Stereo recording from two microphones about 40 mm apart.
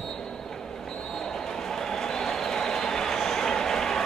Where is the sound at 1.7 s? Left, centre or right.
Centre.